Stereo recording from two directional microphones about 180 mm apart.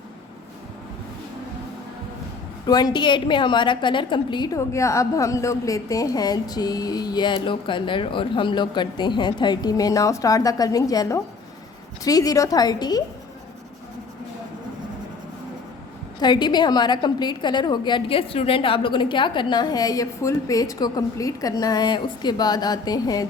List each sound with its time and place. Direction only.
2.6 s a woman's voice: 20° left (ahead or behind)
16.2 s a woman's voice: 25° left (ahead or behind)